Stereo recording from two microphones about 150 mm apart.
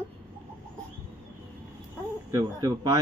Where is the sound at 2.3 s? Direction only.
25° right (ahead or behind).